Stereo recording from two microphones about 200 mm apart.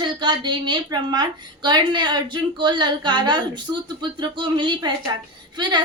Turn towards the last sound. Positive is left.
turn(degrees=-20)  # may be behind; listen again after turning